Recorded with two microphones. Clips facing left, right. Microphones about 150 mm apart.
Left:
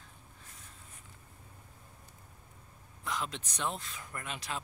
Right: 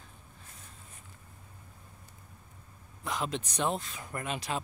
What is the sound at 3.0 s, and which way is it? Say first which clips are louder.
Speech: right 4 dB; 15° right (ahead or behind).